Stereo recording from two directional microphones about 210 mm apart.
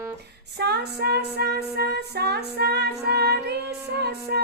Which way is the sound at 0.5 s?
50° right (ahead or behind).